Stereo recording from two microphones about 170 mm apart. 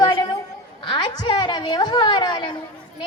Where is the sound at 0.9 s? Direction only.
25° left (ahead or behind).